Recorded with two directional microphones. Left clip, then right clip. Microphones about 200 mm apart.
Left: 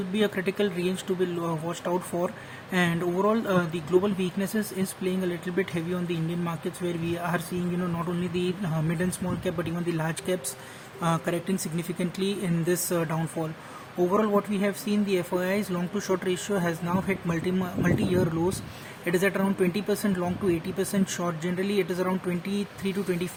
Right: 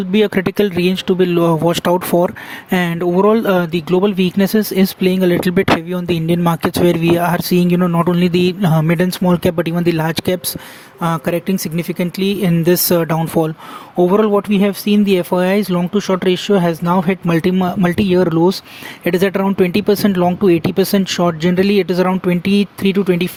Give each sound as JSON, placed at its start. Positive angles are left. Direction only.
{"t": 0.1, "sound": "speech", "side_deg": -45}